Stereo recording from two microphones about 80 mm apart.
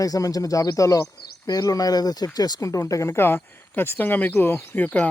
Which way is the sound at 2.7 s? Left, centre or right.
Left.